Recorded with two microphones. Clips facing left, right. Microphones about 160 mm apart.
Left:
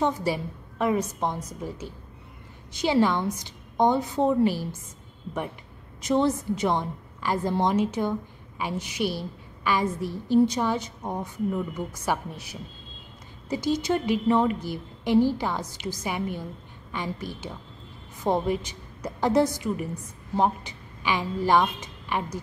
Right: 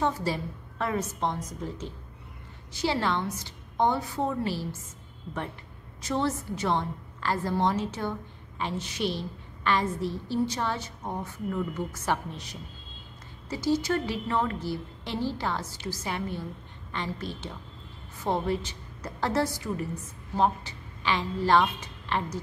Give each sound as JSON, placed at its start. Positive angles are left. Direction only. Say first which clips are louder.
{"t": 0.0, "sound": "a woman's voice", "louder": "left 3 dB", "side_deg": 15}
{"t": 5.9, "sound": "a woman's voice", "louder": "left 5 dB", "side_deg": 20}